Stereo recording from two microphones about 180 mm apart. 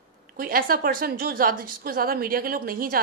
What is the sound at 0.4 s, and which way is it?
A woman's voice, 55° right (ahead or behind).